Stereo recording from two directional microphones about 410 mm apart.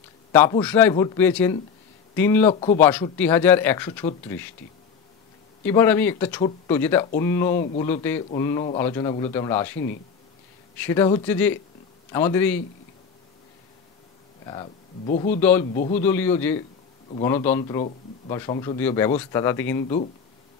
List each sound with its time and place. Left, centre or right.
0.3 s a man's voice: centre
5.6 s a man's voice: centre
10.8 s a man's voice: centre
14.4 s a man's voice: centre
16.0 s a man's voice: centre